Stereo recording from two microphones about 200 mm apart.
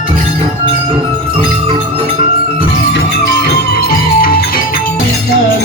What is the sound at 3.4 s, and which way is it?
Music, 50° left (ahead or behind).